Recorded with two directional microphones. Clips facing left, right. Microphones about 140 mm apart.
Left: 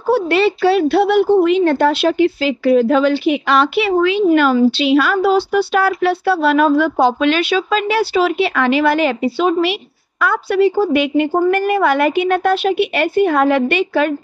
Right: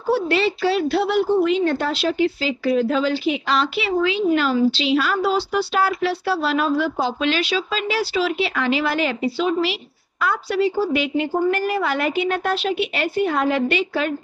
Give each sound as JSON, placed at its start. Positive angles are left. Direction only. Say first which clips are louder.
{"t": 0.1, "sound": "speech", "louder": "left 5 dB", "side_deg": 60}